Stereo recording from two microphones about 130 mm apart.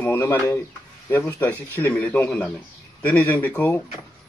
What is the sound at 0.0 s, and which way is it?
A man's voice, 20° left (ahead or behind).